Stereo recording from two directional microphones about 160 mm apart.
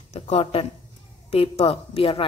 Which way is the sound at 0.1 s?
40° left (ahead or behind).